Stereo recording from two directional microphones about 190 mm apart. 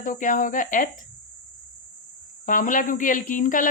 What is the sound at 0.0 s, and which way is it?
Speech, 45° left (ahead or behind).